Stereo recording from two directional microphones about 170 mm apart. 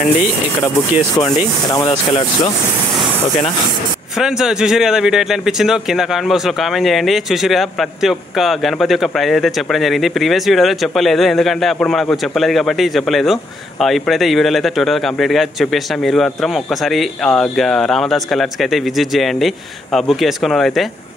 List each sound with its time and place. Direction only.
1.9 s speech: 25° left (ahead or behind)
4.2 s speech: 5° right (ahead or behind)